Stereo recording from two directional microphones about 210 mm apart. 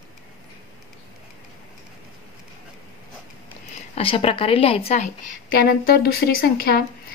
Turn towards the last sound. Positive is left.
turn(degrees=45)  # may be behind; listen again after turning